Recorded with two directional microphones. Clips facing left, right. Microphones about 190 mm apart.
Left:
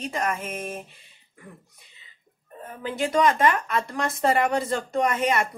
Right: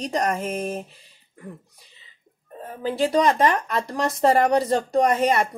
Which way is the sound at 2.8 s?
35° right (ahead or behind).